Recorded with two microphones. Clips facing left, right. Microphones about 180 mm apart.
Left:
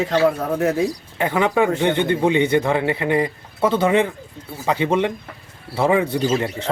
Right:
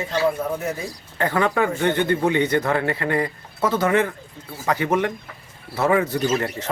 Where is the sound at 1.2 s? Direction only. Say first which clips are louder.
Left 2 dB; 15° left (ahead or behind).